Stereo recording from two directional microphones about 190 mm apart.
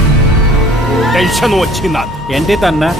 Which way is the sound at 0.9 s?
Centre (ahead or behind).